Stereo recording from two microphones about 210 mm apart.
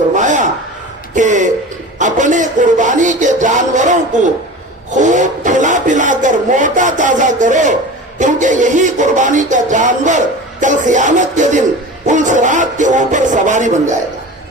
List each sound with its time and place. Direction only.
0.1 s rub: 35° right (ahead or behind)
1.1 s speech: 35° right (ahead or behind)
2.0 s a sound: 35° right (ahead or behind)